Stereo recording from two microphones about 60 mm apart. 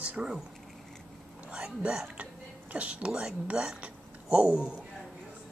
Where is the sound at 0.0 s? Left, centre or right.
Centre.